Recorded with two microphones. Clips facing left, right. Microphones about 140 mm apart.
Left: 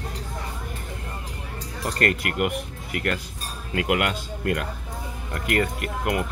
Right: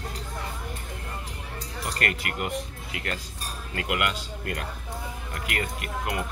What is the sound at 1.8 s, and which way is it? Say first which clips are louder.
Speech: left 6 dB; 45° left (ahead or behind).